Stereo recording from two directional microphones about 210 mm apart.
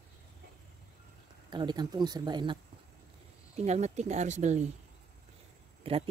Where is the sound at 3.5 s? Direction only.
30° right (ahead or behind).